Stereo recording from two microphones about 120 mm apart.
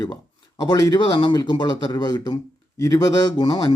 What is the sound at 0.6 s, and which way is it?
A man's voice, 35° left (ahead or behind).